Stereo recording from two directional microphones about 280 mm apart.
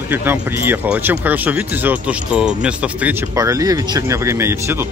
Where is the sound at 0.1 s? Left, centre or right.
Centre.